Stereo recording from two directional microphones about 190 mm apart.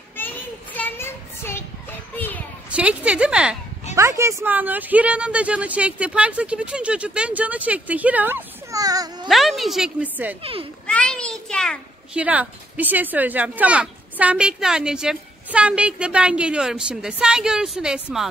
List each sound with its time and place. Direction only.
0.2 s child singing: 10° left (ahead or behind)
2.1 s a sound: 10° left (ahead or behind)
2.7 s speech: 5° right (ahead or behind)
3.9 s speech: 15° right (ahead or behind)
9.3 s a woman's voice: centre (ahead or behind)
10.4 s a child's voice: 30° right (ahead or behind)
10.9 s a sound: 5° left (ahead or behind)
12.2 s speech: 10° right (ahead or behind)